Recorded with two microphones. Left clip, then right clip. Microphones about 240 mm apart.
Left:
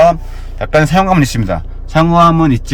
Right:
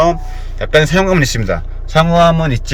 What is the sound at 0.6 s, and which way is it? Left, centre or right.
A man's voice, centre.